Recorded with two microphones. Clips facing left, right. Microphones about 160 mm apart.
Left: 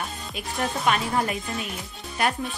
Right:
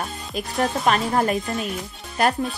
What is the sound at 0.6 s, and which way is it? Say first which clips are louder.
A woman's voice: right 4 dB; 40° right (ahead or behind).